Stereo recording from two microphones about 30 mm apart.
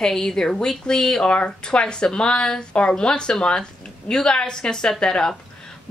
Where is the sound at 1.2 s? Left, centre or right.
Left.